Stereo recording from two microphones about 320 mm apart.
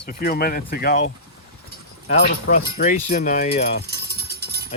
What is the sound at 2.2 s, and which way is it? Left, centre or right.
Speech, left.